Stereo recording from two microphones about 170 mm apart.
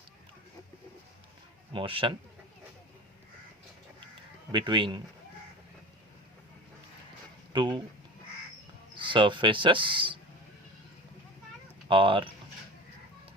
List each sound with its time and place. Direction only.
1.7 s speech: 30° right (ahead or behind)
4.5 s speech: 30° right (ahead or behind)
7.5 s speech: 30° right (ahead or behind)
9.0 s speech: 30° right (ahead or behind)
11.9 s speech: 30° right (ahead or behind)